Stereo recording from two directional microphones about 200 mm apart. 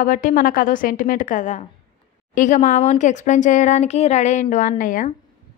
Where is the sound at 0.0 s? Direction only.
45° left (ahead or behind).